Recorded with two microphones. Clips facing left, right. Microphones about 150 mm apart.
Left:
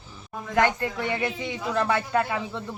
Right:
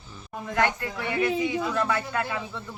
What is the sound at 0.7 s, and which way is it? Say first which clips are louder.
A woman's voice: even; 30° left (ahead or behind).